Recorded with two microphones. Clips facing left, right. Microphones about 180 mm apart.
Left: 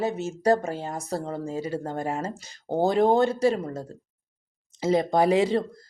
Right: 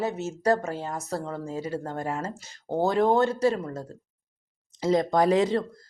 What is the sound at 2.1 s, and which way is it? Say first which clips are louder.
Speech: left 1 dB; 25° left (ahead or behind).